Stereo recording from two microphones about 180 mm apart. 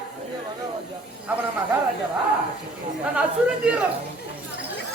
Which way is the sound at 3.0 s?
5° right (ahead or behind).